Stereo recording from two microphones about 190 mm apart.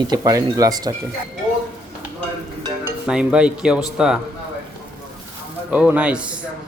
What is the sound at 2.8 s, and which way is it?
Speech, 5° right (ahead or behind).